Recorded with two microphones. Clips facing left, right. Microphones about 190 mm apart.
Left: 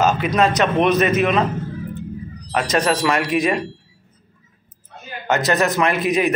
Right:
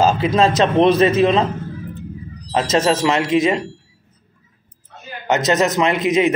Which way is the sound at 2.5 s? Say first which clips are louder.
Right 2 dB; 25° right (ahead or behind).